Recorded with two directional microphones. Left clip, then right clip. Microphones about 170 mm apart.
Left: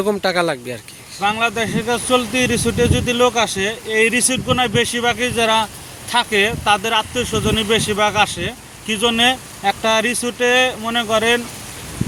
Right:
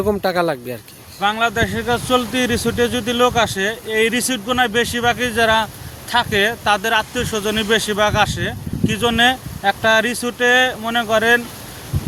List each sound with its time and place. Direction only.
0.0 s speech: 5° right (ahead or behind)